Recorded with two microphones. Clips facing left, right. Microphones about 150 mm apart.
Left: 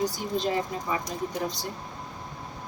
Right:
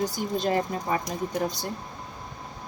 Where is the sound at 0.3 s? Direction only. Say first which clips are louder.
Right 2 dB; 50° right (ahead or behind).